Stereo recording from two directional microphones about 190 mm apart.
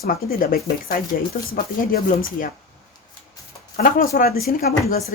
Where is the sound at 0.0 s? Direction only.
50° left (ahead or behind).